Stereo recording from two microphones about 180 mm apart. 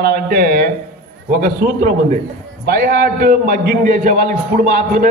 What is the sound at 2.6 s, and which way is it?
A man's voice, 65° right (ahead or behind).